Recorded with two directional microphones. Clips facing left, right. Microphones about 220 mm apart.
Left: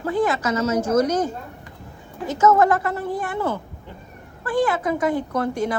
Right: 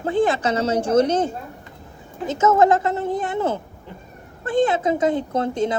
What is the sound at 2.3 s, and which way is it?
Speech, 20° right (ahead or behind).